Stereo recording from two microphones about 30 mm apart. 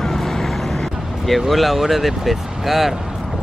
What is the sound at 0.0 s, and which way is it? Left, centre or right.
Vehicle, centre.